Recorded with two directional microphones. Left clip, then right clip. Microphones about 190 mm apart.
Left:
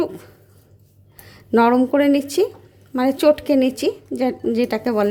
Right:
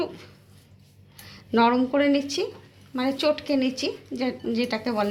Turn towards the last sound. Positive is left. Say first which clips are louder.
# left 7 dB
turn(degrees=65)  # may be behind; listen again after turning